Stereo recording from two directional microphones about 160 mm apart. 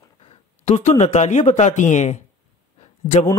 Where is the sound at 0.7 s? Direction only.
45° left (ahead or behind).